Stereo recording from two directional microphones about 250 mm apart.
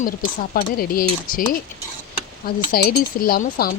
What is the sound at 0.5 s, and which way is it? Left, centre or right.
Speech, left.